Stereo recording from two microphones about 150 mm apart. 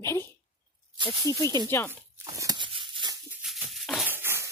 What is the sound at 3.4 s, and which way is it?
Maraca, centre (ahead or behind).